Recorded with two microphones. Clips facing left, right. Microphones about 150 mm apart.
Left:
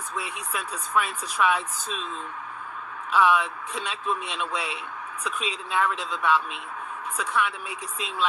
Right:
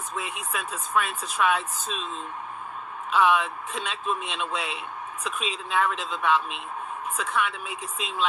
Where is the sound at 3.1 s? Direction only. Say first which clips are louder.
Even; 20° right (ahead or behind).